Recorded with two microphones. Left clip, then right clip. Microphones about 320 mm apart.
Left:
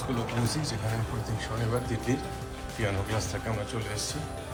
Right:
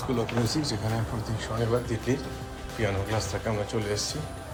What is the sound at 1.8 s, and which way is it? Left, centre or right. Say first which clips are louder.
Speech: right 1 dB; centre.